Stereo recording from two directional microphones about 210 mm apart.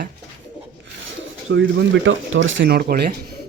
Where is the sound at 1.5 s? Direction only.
60° right (ahead or behind).